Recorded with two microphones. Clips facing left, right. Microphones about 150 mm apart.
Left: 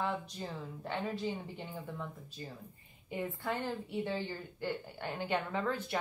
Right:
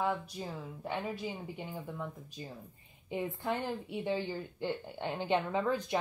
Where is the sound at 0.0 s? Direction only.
10° right (ahead or behind).